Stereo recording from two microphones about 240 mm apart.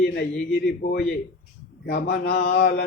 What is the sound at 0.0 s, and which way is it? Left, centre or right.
A man's voice, left.